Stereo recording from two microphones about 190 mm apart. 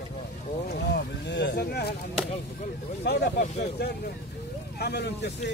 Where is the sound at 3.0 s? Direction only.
60° left (ahead or behind).